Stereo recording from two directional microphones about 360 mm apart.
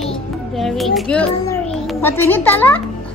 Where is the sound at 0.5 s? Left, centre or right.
Centre.